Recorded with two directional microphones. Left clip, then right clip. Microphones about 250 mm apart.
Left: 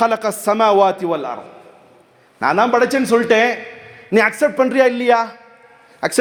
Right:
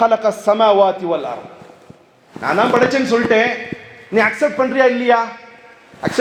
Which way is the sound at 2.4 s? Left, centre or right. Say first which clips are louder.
Even; left.